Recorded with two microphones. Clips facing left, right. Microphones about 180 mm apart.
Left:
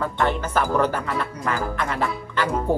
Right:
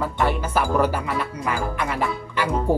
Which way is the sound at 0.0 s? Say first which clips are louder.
Even; 10° right (ahead or behind).